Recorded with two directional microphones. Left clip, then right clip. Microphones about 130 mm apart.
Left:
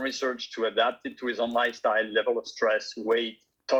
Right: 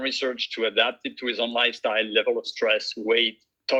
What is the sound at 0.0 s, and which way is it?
Speech, 15° right (ahead or behind).